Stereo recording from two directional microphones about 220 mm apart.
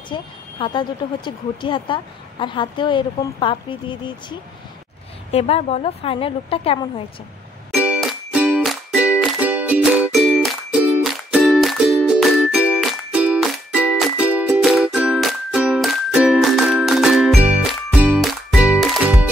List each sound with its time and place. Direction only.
0.1 s speech: 20° left (ahead or behind)
7.8 s music: 5° right (ahead or behind)